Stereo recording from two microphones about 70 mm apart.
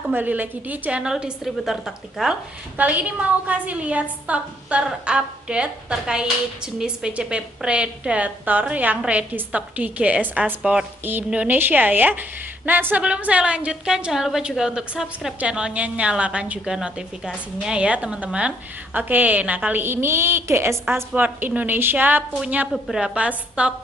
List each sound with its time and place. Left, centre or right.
0.1 s a woman's voice: right
1.4 s a woman's voice: centre
2.8 s a woman's voice: right
18.9 s a woman's voice: right
21.1 s a woman's voice: right